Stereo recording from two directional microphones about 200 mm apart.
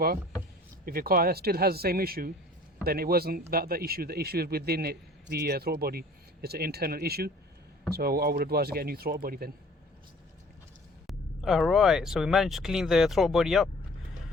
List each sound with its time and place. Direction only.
0.9 s a man's voice: 45° right (ahead or behind)
11.0 s speech: centre (ahead or behind)